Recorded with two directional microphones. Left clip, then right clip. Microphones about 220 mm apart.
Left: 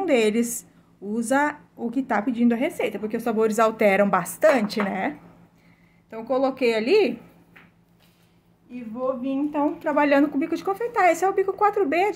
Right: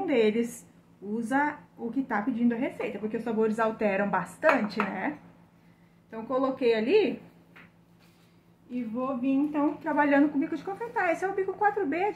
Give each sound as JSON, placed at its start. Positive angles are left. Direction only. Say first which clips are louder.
{"t": 0.0, "sound": "a woman's voice", "louder": "left 4 dB", "side_deg": 45}
{"t": 9.2, "sound": "a woman's voice", "louder": "left 3 dB", "side_deg": 35}